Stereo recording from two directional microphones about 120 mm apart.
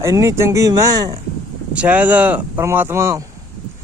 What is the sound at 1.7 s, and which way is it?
Speech, 10° right (ahead or behind).